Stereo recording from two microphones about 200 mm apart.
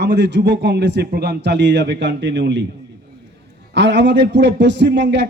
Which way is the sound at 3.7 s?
60° right (ahead or behind).